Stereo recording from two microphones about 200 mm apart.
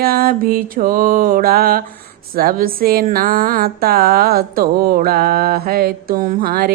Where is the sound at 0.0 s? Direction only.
50° right (ahead or behind).